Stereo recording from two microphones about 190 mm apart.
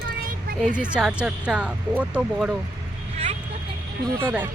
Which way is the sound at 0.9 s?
5° right (ahead or behind).